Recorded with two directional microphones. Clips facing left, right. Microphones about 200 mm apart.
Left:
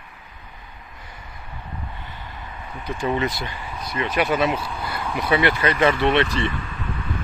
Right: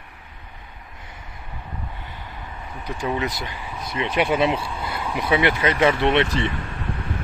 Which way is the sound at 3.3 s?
15° right (ahead or behind).